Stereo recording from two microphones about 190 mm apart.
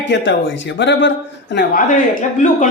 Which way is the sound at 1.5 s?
50° left (ahead or behind).